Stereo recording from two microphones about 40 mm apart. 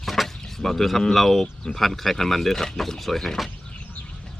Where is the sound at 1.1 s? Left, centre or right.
Centre.